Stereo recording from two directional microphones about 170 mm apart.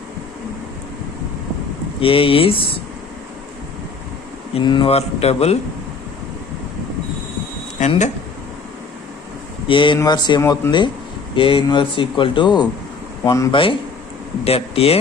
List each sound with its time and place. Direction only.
2.0 s speech: 30° left (ahead or behind)
4.5 s speech: 30° left (ahead or behind)
7.8 s speech: 45° left (ahead or behind)
9.6 s speech: 30° left (ahead or behind)
13.5 s speech: 30° left (ahead or behind)